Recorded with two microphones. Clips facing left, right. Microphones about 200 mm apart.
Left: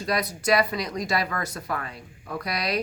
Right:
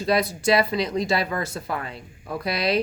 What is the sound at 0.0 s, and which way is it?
Speech, 25° right (ahead or behind).